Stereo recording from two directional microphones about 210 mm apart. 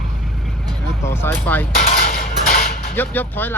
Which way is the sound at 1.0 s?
10° left (ahead or behind).